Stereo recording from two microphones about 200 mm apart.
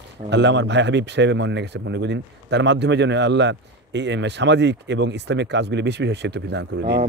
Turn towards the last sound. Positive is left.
turn(degrees=-55)  # may be behind; listen again after turning